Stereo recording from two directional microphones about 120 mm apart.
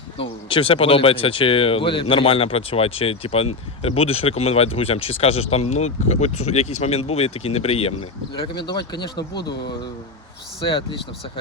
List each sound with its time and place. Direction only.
0.2 s speech: 50° left (ahead or behind)
8.4 s speech: 40° left (ahead or behind)